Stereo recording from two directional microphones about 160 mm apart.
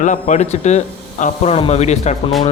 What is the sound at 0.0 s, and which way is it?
Speech, 50° left (ahead or behind).